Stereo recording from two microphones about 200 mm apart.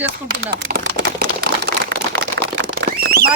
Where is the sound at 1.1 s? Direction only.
45° right (ahead or behind).